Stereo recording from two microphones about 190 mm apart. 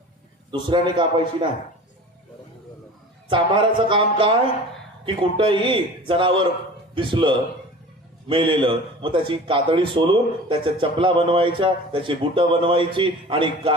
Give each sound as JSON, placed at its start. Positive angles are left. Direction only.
{"t": 0.5, "sound": "a man's voice", "side_deg": -25}
{"t": 3.2, "sound": "a man's voice", "side_deg": -25}